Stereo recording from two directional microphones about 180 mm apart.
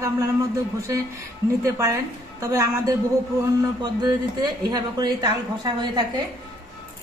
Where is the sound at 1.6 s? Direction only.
15° right (ahead or behind).